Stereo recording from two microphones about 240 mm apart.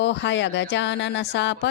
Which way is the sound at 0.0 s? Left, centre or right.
Left.